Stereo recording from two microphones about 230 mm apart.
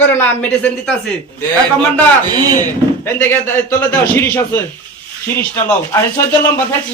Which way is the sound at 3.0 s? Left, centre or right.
Centre.